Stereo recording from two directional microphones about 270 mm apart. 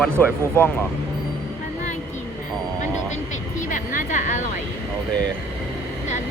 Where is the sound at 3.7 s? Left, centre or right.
Left.